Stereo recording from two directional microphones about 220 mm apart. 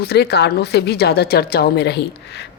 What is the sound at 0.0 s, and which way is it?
A woman's voice, 45° left (ahead or behind).